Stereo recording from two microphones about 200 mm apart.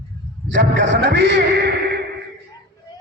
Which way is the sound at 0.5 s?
60° right (ahead or behind).